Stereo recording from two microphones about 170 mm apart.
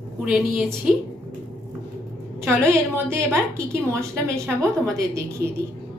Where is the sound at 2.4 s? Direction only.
15° right (ahead or behind).